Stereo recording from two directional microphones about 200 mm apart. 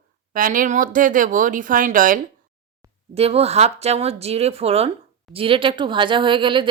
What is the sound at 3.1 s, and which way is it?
Speech, 30° right (ahead or behind).